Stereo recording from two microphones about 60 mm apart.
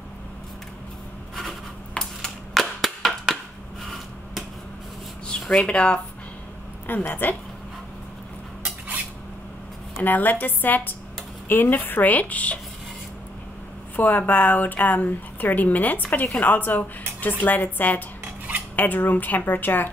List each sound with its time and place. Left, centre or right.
2.0 s a sound: centre
5.5 s speech: centre
6.9 s a woman's voice: left
8.6 s cutlery: right
10.0 s a woman's voice: left
13.9 s a woman's voice: left